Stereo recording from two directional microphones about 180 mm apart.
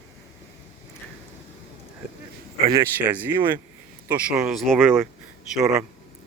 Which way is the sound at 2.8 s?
10° right (ahead or behind).